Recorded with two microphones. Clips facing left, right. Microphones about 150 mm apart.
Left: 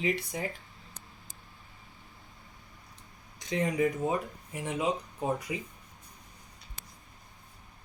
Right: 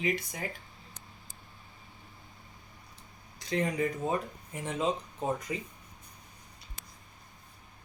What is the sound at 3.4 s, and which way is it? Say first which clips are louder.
Speech: left 2 dB; 15° left (ahead or behind).